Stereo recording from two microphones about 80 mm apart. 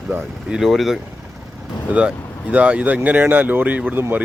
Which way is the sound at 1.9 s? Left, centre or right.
Centre.